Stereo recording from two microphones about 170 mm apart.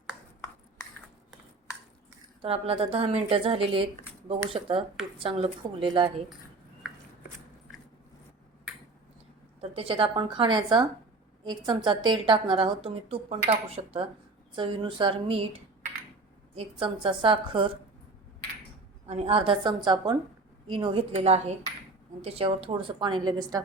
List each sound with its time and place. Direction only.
2.4 s a woman's voice: 35° right (ahead or behind)
9.6 s a woman's voice: 35° right (ahead or behind)
16.6 s a woman's voice: 30° right (ahead or behind)
19.0 s a woman's voice: 35° right (ahead or behind)